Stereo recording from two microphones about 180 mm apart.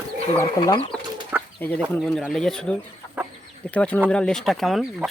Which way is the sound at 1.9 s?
5° left (ahead or behind).